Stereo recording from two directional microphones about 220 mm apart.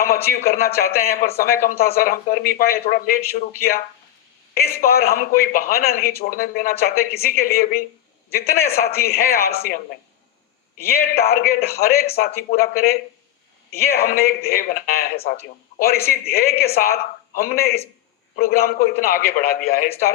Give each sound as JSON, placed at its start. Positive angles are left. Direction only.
{"t": 0.0, "sound": "speech", "side_deg": 45}
{"t": 4.5, "sound": "speech", "side_deg": 45}
{"t": 11.1, "sound": "speech", "side_deg": 45}